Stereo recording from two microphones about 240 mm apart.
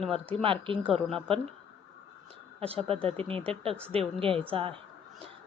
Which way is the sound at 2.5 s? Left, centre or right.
Right.